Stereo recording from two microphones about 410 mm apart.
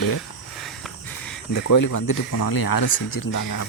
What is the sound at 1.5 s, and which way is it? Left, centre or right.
Speech, left.